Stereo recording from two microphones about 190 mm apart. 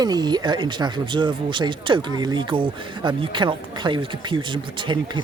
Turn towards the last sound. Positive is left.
turn(degrees=-25)  # may be behind; listen again after turning